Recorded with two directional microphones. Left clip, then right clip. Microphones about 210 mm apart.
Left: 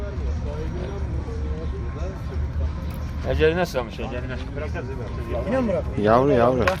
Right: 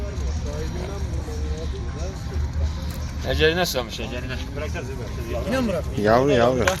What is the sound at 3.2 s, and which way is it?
Speech, 10° left (ahead or behind).